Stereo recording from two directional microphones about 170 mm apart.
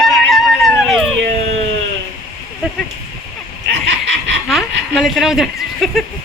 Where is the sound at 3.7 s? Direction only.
90° right.